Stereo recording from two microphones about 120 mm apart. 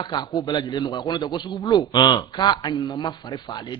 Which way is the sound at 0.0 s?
40° left (ahead or behind).